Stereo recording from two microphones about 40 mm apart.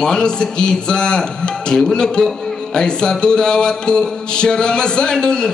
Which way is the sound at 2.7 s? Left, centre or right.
Left.